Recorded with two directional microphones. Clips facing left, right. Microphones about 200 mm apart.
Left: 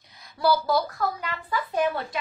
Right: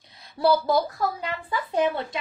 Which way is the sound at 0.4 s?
25° right (ahead or behind).